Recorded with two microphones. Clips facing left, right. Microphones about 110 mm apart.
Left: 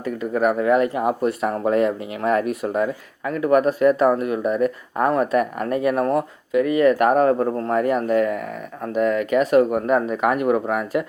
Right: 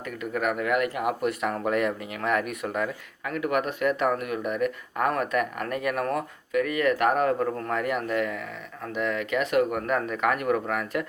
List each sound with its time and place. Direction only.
0.0 s speech: 30° left (ahead or behind)